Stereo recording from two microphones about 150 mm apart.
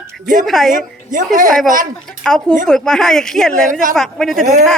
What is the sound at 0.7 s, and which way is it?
Speech, 60° right (ahead or behind).